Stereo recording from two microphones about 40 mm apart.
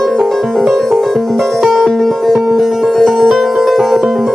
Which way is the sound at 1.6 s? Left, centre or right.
Centre.